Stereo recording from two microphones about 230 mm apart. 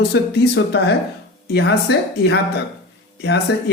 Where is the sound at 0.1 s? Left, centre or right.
Left.